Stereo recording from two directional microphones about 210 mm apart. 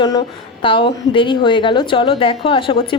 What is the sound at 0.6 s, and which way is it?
A woman's voice, 25° left (ahead or behind).